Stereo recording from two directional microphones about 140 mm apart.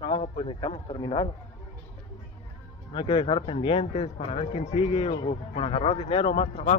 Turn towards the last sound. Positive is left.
turn(degrees=45)  # may be behind; listen again after turning